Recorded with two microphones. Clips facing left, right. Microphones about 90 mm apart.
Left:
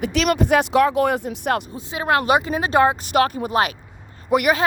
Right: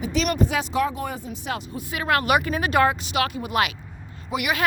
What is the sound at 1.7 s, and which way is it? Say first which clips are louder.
Speech: left 3 dB; 25° left (ahead or behind).